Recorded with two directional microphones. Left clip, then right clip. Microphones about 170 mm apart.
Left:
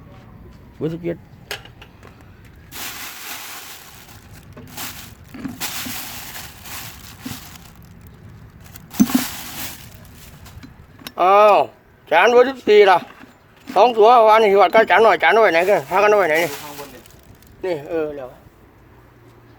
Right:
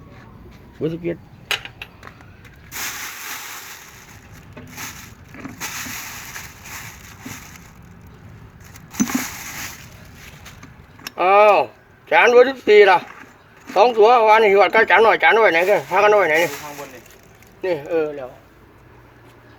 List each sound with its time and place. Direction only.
0.8 s speech: 10° left (ahead or behind)
2.7 s a sound: 20° left (ahead or behind)
11.1 s speech: 10° left (ahead or behind)
17.6 s speech: 5° left (ahead or behind)